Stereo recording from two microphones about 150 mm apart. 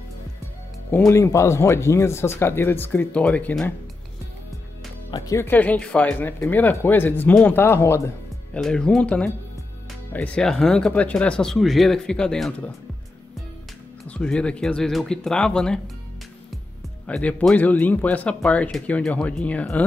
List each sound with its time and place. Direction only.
0.9 s speech: 20° left (ahead or behind)
5.1 s speech: 25° left (ahead or behind)
8.5 s speech: 5° left (ahead or behind)
14.0 s speech: 5° left (ahead or behind)
17.0 s speech: 10° left (ahead or behind)